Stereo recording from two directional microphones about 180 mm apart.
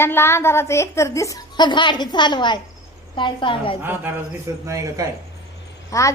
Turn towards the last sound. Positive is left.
turn(degrees=15)  # may be behind; listen again after turning